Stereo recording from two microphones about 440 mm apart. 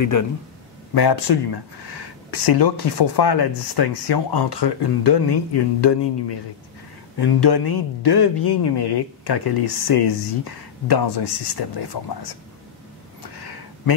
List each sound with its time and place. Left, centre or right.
0.0 s a man's voice: left
0.9 s speech: left
7.2 s speech: left